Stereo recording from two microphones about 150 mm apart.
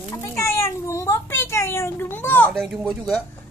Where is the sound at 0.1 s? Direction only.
20° left (ahead or behind).